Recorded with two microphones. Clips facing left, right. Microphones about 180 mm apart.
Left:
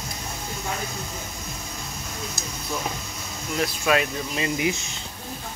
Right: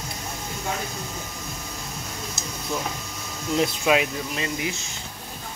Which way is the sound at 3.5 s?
20° right (ahead or behind).